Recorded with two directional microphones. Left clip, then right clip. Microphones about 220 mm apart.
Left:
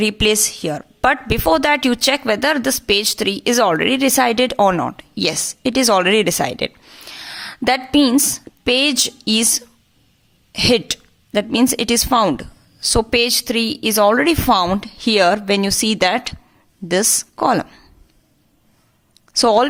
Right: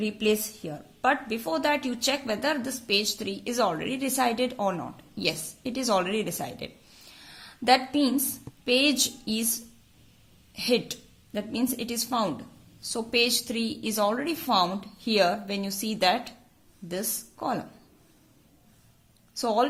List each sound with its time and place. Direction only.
0.0 s a woman's voice: 30° left (ahead or behind)
19.3 s speech: 30° left (ahead or behind)